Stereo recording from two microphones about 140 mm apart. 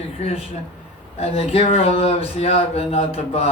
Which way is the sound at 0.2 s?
45° left (ahead or behind).